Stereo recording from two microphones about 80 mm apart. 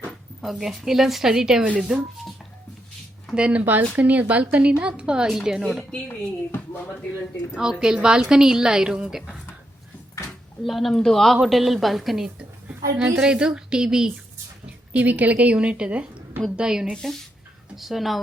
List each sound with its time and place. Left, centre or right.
0.4 s speech: centre
3.3 s a woman's voice: centre
5.9 s speech: left
7.5 s a woman's voice: centre
10.6 s a woman's voice: centre
16.9 s speech: centre